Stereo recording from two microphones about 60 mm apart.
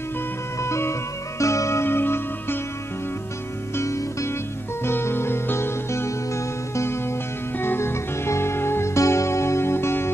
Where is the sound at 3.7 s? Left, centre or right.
Left.